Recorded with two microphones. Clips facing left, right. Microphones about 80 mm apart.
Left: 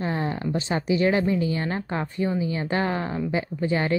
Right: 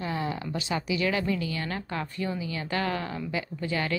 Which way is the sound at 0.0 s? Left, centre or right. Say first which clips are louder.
Left 4 dB; left.